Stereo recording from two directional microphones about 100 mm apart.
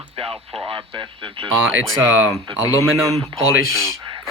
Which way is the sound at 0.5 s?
70° right (ahead or behind).